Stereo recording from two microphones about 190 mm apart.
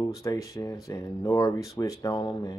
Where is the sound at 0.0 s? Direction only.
20° left (ahead or behind).